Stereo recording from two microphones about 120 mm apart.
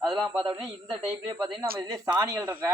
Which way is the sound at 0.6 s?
10° right (ahead or behind).